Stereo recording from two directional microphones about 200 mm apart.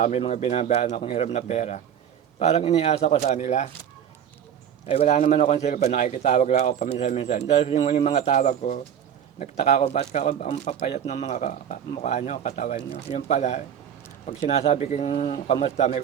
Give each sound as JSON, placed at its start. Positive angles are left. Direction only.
{"t": 0.0, "sound": "speech", "side_deg": 35}
{"t": 4.9, "sound": "speech", "side_deg": 35}